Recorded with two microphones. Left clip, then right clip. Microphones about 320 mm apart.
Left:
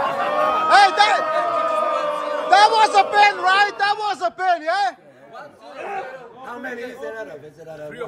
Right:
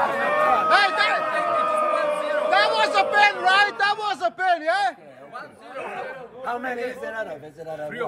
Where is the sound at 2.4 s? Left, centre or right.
Centre.